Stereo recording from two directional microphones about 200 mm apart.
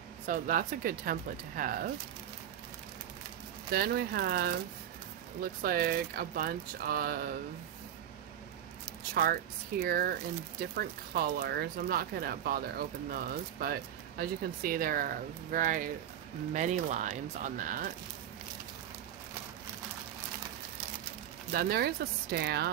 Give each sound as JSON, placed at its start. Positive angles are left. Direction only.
{"t": 0.3, "sound": "speech", "side_deg": -45}
{"t": 3.7, "sound": "speech", "side_deg": -50}
{"t": 5.6, "sound": "speech", "side_deg": -45}
{"t": 9.1, "sound": "speech", "side_deg": -50}
{"t": 21.5, "sound": "speech", "side_deg": -50}